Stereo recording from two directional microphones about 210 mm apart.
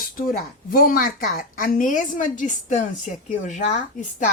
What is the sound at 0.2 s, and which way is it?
Speech, 40° left (ahead or behind).